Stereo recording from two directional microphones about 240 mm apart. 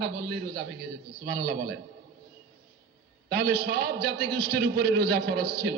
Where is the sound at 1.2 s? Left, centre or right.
Right.